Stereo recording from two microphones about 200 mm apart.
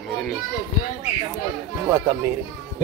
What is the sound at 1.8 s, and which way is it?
Speech, 15° right (ahead or behind).